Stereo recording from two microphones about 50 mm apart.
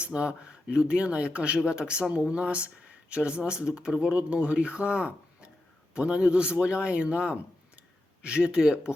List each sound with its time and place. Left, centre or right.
0.0 s speech: right